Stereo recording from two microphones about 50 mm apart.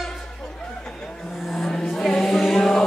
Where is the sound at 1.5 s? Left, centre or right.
Centre.